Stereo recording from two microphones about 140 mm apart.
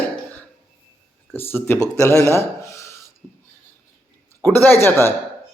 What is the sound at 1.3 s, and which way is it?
Speech, 15° left (ahead or behind).